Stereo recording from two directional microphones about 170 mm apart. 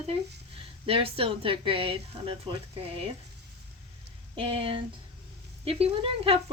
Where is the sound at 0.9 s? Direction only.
35° right (ahead or behind).